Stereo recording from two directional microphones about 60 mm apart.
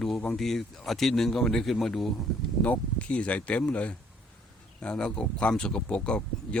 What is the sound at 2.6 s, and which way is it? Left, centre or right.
Speech, left.